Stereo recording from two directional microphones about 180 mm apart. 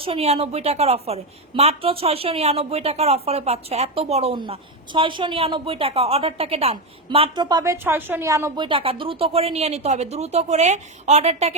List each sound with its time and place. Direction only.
0.0 s a woman's voice: 35° right (ahead or behind); by 8.6 s 15° right (ahead or behind)
8.6 s a woman's voice: 30° right (ahead or behind)